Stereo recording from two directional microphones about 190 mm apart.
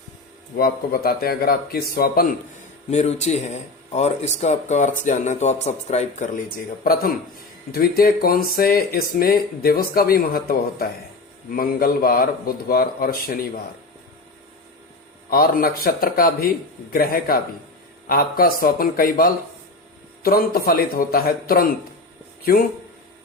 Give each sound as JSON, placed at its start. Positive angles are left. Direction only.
{"t": 0.5, "sound": "speech", "side_deg": 55}
{"t": 2.9, "sound": "speech", "side_deg": 35}
{"t": 7.7, "sound": "speech", "side_deg": 55}
{"t": 15.3, "sound": "speech", "side_deg": 50}